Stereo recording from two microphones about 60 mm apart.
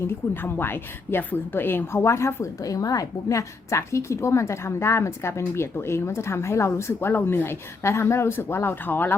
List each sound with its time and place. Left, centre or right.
0.0 s a woman's voice: left
2.6 s a woman's voice: left